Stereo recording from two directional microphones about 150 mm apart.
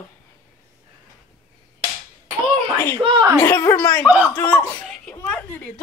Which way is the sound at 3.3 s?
20° left (ahead or behind).